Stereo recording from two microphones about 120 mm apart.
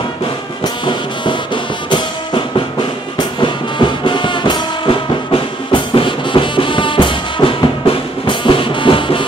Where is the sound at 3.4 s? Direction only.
40° left (ahead or behind).